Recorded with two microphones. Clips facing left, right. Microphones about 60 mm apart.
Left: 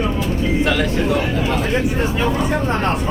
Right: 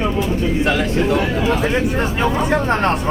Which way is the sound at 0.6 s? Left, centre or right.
Right.